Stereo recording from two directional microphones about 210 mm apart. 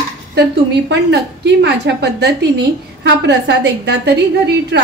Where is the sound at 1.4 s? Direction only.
55° right (ahead or behind).